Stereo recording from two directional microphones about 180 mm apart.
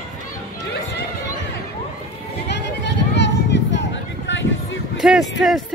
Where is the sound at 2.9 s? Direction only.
80° left.